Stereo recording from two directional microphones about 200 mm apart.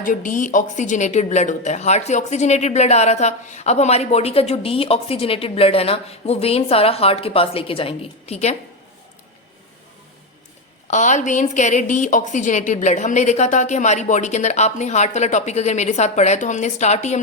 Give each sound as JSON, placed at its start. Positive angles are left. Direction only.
{"t": 0.0, "sound": "speech", "side_deg": 40}
{"t": 10.8, "sound": "speech", "side_deg": 35}